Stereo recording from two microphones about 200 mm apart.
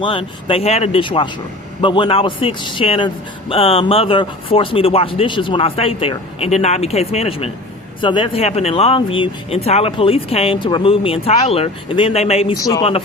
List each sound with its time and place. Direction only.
0.0 s speech: 25° left (ahead or behind)